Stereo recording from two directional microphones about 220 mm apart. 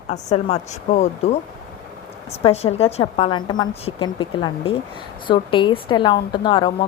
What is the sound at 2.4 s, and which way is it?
A woman's voice, 30° left (ahead or behind).